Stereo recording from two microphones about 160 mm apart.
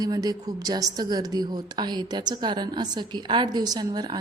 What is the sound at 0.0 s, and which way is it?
A woman's voice, 25° right (ahead or behind).